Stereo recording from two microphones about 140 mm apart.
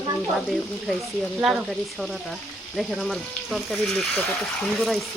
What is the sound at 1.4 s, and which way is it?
Speech, centre (ahead or behind).